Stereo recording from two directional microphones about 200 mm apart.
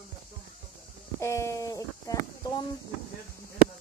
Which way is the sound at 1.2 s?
15° left (ahead or behind).